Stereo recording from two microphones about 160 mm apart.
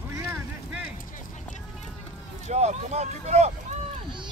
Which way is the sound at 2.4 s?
45° right (ahead or behind).